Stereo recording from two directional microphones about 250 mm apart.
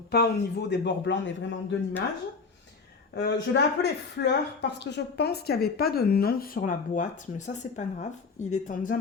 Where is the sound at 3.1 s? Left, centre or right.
Left.